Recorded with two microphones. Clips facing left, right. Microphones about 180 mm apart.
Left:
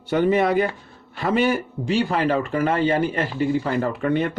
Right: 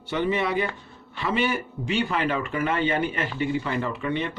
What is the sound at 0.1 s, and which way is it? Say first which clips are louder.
Speech: left 6 dB; 45° left (ahead or behind).